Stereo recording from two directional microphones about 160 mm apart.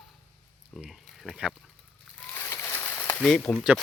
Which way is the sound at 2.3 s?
15° left (ahead or behind).